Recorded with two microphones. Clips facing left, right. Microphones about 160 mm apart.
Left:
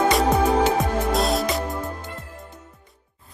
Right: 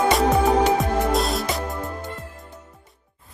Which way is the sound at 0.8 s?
Centre (ahead or behind).